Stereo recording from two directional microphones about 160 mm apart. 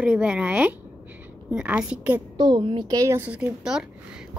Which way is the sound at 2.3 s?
25° right (ahead or behind).